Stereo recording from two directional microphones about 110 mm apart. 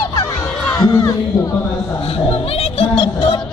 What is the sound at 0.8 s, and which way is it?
Speech, 30° left (ahead or behind).